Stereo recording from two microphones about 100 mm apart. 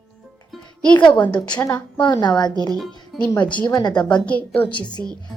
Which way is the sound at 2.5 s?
45° right (ahead or behind).